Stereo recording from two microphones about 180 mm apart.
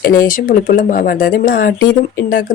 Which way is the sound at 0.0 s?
50° left (ahead or behind).